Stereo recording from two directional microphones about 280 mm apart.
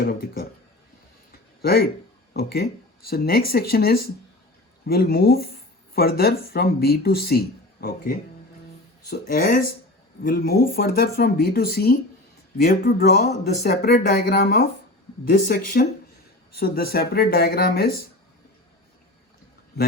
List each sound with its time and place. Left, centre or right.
0.0 s speech: left
1.6 s speech: left